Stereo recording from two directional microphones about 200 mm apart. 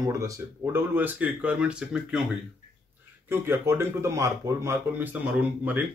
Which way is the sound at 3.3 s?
10° right (ahead or behind).